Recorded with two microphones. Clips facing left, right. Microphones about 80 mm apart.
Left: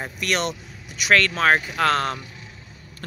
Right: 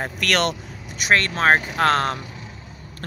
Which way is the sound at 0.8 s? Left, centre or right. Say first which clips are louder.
Left 1 dB; right.